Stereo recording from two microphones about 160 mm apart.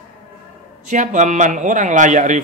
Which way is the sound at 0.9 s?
50° right (ahead or behind).